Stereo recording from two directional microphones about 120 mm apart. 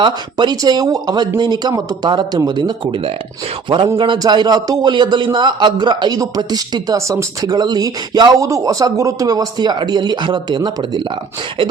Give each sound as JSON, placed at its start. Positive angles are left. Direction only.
{"t": 0.0, "sound": "a man's voice", "side_deg": -40}
{"t": 3.9, "sound": "a man's voice", "side_deg": -40}